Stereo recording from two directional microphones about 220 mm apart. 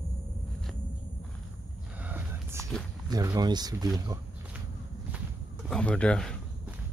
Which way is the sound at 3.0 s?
15° right (ahead or behind).